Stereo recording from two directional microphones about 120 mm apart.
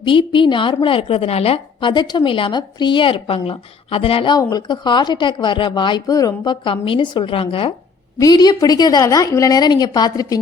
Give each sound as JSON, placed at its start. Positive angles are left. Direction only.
{"t": 0.0, "sound": "a woman's voice", "side_deg": 45}
{"t": 4.4, "sound": "a woman's voice", "side_deg": 35}
{"t": 8.2, "sound": "a woman's voice", "side_deg": 35}